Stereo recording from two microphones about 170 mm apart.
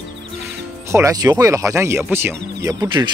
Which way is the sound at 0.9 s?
20° right (ahead or behind).